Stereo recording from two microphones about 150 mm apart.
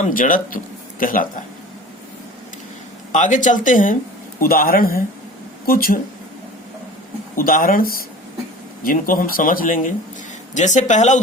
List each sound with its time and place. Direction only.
0.0 s speech: 65° left (ahead or behind)
3.1 s speech: 55° left (ahead or behind)
4.4 s speech: 75° left (ahead or behind)
7.3 s speech: 70° left (ahead or behind); by 11.2 s 55° left (ahead or behind)